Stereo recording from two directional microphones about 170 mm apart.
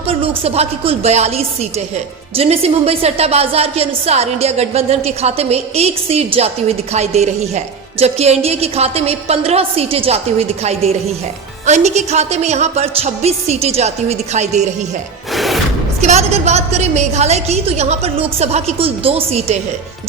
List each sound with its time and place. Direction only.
0.1 s speech: 35° right (ahead or behind)
2.3 s a woman's voice: 35° right (ahead or behind)
15.4 s music: centre (ahead or behind)
16.0 s a woman's voice: 40° right (ahead or behind)